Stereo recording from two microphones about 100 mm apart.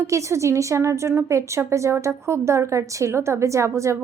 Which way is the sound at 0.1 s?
30° right (ahead or behind).